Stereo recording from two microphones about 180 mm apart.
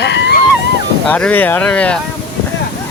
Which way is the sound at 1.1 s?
10° left (ahead or behind).